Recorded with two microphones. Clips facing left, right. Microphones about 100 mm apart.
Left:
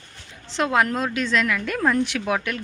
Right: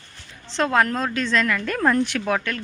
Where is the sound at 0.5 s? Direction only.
10° left (ahead or behind).